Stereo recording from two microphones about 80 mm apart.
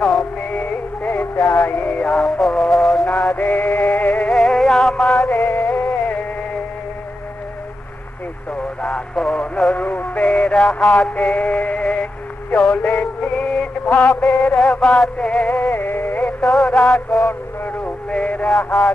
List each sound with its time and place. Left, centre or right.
0.0 s music: centre
2.0 s music: centre
3.1 s music: centre
4.3 s music: centre
5.3 s music: left
8.8 s radio: centre
9.8 s synthetic singing: left
12.4 s music: left
14.2 s music: centre
15.5 s music: left
16.3 s music: centre
17.3 s music: left
18.1 s synthetic singing: centre